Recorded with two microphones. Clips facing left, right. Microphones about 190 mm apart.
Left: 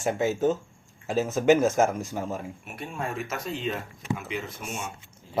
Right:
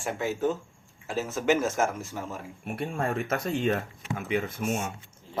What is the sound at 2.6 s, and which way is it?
Speech, 50° right (ahead or behind).